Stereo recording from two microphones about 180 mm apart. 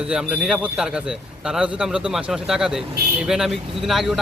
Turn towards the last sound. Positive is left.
turn(degrees=0)  # may be behind; listen again after turning